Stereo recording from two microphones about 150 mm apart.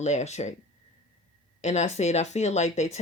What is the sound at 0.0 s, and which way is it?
Speech, 50° left (ahead or behind).